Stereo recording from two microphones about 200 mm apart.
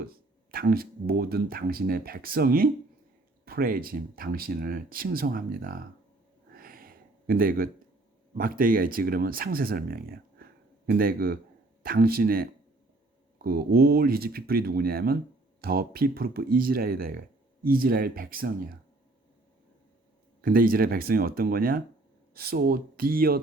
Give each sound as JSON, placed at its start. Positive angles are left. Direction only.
{"t": 0.0, "sound": "speech", "side_deg": -50}
{"t": 6.5, "sound": "a sound", "side_deg": -45}
{"t": 8.4, "sound": "speech", "side_deg": -45}
{"t": 20.4, "sound": "speech", "side_deg": -45}